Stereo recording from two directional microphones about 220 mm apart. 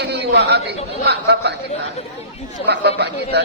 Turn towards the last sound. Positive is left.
turn(degrees=-50)  # may be behind; listen again after turning